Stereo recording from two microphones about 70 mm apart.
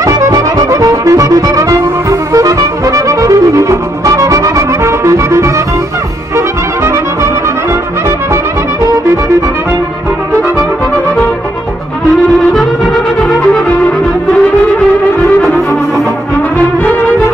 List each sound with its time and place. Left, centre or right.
0.0 s music: right
6.3 s brass instrument: right
12.1 s brass instrument: centre